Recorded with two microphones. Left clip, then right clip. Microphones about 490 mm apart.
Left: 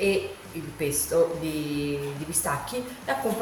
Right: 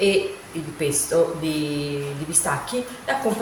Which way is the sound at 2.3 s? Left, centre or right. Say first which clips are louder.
Right 5 dB; left.